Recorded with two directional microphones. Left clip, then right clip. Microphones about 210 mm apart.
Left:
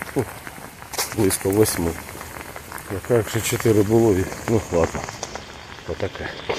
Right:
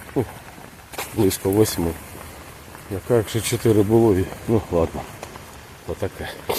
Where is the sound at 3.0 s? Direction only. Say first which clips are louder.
Even; 15° right (ahead or behind).